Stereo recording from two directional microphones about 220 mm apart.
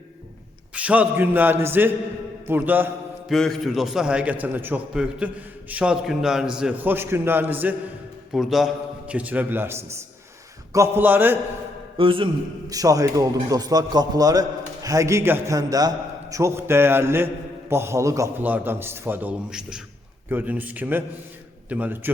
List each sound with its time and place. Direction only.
0.7 s a man's voice: 5° right (ahead or behind)
3.3 s a man's voice: centre (ahead or behind)
11.9 s a man's voice: 25° right (ahead or behind); by 22.1 s 10° right (ahead or behind)